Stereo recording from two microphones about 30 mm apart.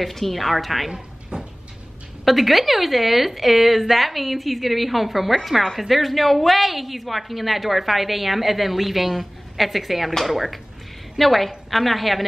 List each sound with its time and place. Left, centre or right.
0.0 s a woman's voice: centre
1.3 s a sound: right
2.2 s a woman's voice: centre